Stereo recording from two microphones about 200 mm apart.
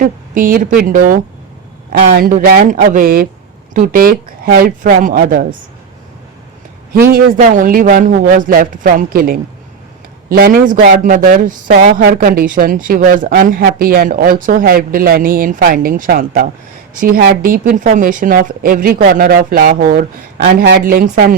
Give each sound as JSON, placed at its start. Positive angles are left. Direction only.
{"t": 0.0, "sound": "speech", "side_deg": -45}
{"t": 6.9, "sound": "speech", "side_deg": -50}